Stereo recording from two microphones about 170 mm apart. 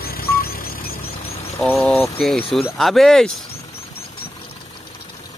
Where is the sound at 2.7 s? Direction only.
Centre (ahead or behind).